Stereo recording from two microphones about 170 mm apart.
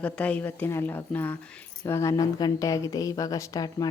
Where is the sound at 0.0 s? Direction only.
5° left (ahead or behind).